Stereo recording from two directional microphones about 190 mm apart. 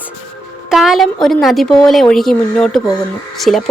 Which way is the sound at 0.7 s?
Centre (ahead or behind).